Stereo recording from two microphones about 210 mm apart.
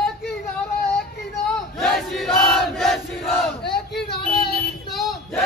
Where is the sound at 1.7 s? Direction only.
Centre (ahead or behind).